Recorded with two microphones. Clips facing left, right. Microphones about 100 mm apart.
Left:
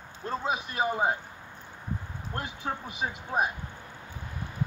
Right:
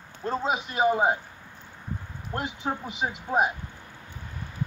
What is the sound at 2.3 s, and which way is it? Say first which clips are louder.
Speech: right 4 dB; 20° right (ahead or behind).